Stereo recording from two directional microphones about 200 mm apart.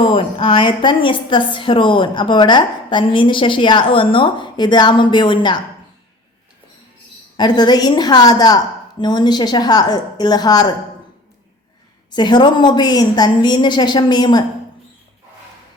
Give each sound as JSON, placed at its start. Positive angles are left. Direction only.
{"t": 0.0, "sound": "a woman's voice", "side_deg": 25}
{"t": 7.3, "sound": "a woman's voice", "side_deg": 20}
{"t": 12.1, "sound": "a woman's voice", "side_deg": 20}